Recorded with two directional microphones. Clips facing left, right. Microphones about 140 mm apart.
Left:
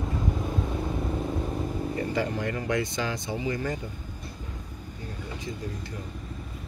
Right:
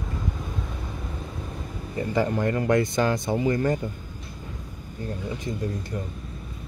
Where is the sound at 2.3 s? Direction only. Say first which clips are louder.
Right 6 dB; 50° right (ahead or behind).